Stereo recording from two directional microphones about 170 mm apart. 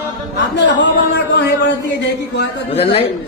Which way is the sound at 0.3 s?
90° left.